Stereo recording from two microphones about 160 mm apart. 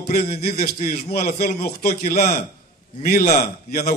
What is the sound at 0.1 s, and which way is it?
A man's voice, 70° left (ahead or behind).